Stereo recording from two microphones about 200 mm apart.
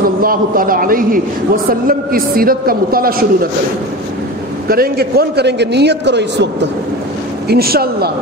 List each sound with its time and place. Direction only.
0.2 s a man's voice: 45° right (ahead or behind)
4.6 s a man's voice: 50° right (ahead or behind)